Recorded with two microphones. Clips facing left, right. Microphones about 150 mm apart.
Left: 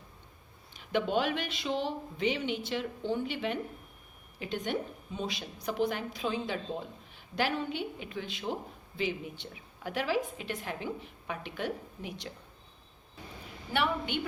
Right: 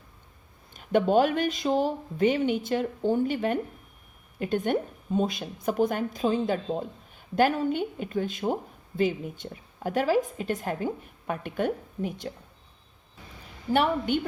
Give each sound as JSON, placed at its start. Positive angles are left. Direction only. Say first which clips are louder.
{"t": 0.7, "sound": "a woman's voice", "louder": "right 7 dB", "side_deg": -45}
{"t": 13.7, "sound": "a woman's voice", "louder": "right 7 dB", "side_deg": -45}